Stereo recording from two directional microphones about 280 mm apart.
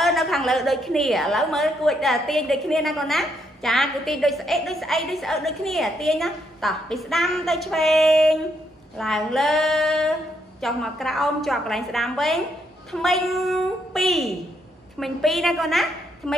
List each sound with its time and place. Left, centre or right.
0.0 s a woman's voice: centre